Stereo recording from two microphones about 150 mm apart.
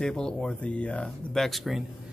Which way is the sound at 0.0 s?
5° left (ahead or behind).